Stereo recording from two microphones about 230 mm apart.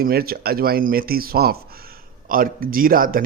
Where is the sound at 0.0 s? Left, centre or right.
Right.